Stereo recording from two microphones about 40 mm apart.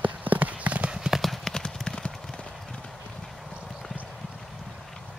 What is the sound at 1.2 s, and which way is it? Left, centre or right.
Clip-clop, centre.